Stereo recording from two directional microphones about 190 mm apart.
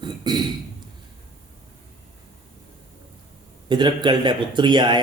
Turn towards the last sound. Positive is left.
turn(degrees=-25)  # may be behind; listen again after turning